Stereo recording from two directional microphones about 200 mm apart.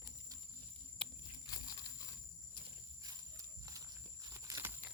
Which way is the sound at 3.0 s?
15° right (ahead or behind).